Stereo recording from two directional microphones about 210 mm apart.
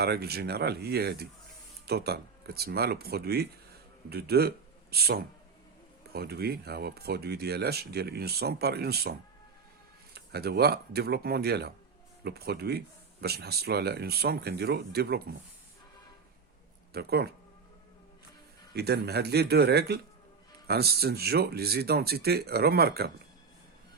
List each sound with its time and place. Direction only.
0.0 s speech: 50° right (ahead or behind)
10.2 s speech: 50° right (ahead or behind)
16.9 s speech: 50° right (ahead or behind)
18.7 s speech: 50° right (ahead or behind)